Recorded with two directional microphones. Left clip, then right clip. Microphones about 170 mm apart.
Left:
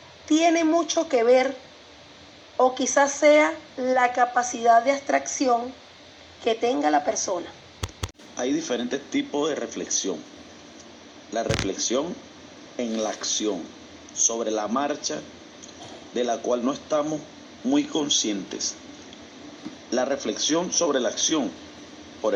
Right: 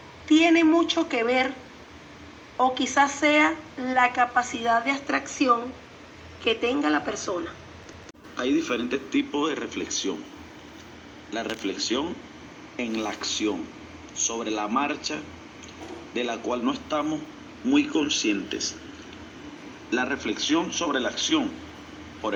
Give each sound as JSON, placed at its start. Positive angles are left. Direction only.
{"t": 0.3, "sound": "speech", "side_deg": 35}
{"t": 2.6, "sound": "speech", "side_deg": 35}
{"t": 8.4, "sound": "speech", "side_deg": 35}
{"t": 11.3, "sound": "speech", "side_deg": 35}
{"t": 19.9, "sound": "a man's voice", "side_deg": 35}